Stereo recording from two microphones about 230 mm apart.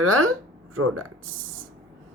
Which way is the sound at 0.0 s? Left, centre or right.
Right.